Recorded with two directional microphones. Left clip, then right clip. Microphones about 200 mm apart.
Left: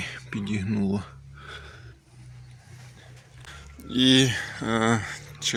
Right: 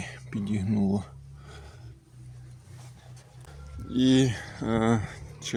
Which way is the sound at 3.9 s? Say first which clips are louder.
Left 4 dB; 5° right (ahead or behind).